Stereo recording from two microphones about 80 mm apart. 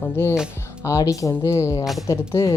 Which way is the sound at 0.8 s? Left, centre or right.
Left.